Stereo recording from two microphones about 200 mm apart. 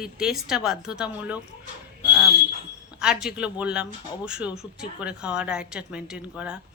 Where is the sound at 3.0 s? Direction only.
5° right (ahead or behind).